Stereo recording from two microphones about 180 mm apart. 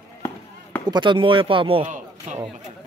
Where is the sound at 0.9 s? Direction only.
25° right (ahead or behind).